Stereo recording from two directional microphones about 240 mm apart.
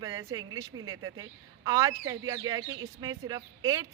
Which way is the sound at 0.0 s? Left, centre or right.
Centre.